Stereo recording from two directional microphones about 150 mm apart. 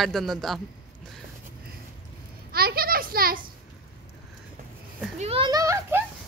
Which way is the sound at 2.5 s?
90° right.